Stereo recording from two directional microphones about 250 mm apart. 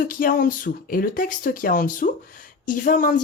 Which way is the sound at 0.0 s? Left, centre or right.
Left.